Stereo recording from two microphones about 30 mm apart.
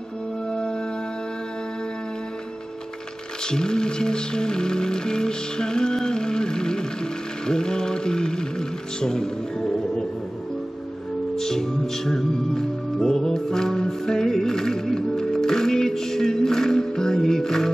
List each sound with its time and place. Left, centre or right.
0.5 s music: left
3.4 s music: left
11.3 s music: centre